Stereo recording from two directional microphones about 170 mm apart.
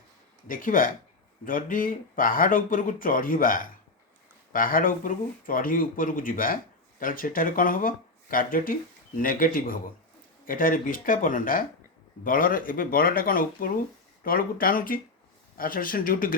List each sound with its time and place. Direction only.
0.4 s speech: 55° left (ahead or behind)